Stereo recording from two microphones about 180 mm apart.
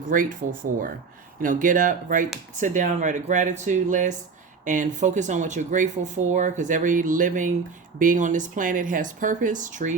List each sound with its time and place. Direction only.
0.0 s speech: 50° right (ahead or behind)